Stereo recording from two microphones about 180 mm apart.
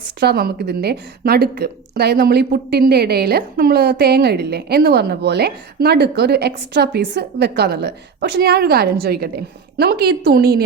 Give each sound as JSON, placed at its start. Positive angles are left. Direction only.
{"t": 0.2, "sound": "a woman's voice", "side_deg": -60}